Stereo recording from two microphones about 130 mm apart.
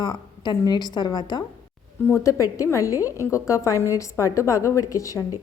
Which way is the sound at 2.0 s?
20° left (ahead or behind).